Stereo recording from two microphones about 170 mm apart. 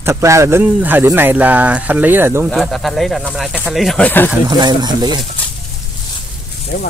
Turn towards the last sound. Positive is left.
turn(degrees=65)  # may be behind; listen again after turning